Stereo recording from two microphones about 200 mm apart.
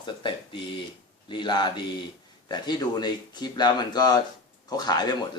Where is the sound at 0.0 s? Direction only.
25° left (ahead or behind).